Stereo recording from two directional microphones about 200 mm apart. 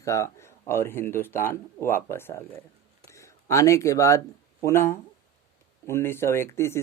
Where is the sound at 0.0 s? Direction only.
15° left (ahead or behind).